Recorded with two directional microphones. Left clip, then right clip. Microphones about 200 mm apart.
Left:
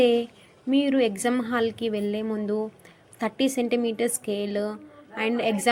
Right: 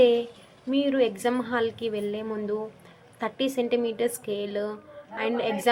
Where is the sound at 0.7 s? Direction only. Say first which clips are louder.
Left 1 dB; 35° left (ahead or behind).